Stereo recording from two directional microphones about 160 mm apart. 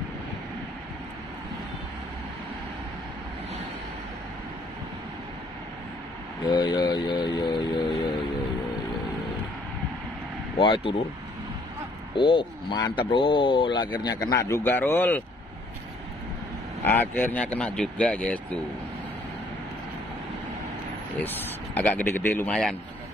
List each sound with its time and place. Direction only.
6.4 s speech: 30° left (ahead or behind)
10.6 s speech: 30° left (ahead or behind)
12.3 s speech: 30° left (ahead or behind); by 15.2 s 10° left (ahead or behind)
16.8 s speech: 10° left (ahead or behind)
21.2 s speech: 10° left (ahead or behind)